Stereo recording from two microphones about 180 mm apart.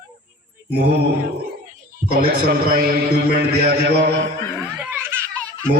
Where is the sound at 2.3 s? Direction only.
65° right (ahead or behind).